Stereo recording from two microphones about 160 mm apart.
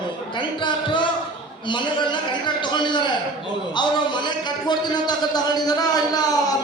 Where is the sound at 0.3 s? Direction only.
30° left (ahead or behind).